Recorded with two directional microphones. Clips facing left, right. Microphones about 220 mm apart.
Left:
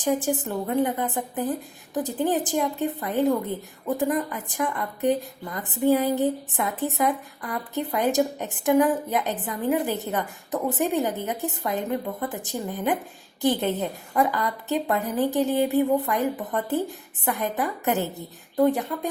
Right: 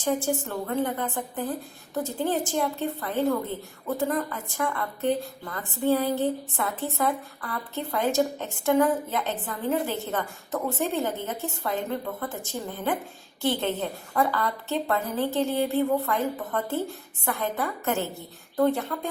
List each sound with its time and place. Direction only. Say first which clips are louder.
0.0 s a woman's voice: left 2 dB; 20° left (ahead or behind)